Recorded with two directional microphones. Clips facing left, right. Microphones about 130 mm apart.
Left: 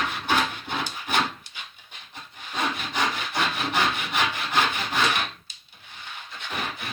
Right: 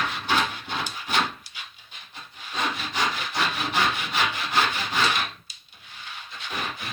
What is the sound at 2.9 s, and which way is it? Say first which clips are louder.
Sawing: left 1 dB; 15° left (ahead or behind).